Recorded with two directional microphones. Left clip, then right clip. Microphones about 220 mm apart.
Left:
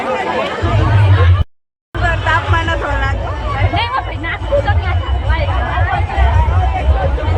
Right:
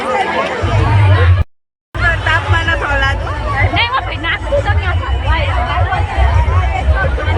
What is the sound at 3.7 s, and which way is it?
Hubbub, 10° left (ahead or behind).